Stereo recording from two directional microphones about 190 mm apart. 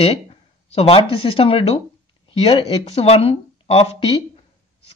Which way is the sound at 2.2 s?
30° left (ahead or behind).